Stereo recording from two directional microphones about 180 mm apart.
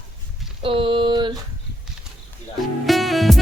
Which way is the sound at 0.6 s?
30° right (ahead or behind).